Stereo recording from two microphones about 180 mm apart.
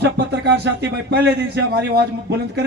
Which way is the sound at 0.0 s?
65° right (ahead or behind).